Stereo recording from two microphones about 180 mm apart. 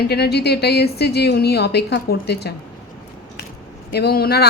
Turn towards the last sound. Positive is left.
turn(degrees=60)  # may be behind; listen again after turning